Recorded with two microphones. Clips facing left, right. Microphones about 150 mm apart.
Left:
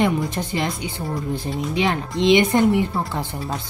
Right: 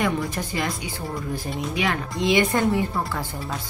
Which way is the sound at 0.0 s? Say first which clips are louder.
Left 4 dB; 25° left (ahead or behind).